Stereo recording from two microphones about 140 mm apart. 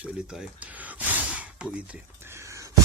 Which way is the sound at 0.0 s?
10° right (ahead or behind).